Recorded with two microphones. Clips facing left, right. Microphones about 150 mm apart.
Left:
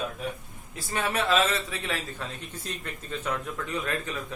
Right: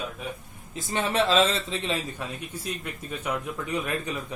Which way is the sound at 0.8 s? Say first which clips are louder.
Right 3 dB; 25° right (ahead or behind).